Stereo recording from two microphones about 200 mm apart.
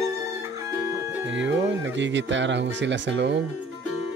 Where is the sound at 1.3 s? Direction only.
65° right (ahead or behind).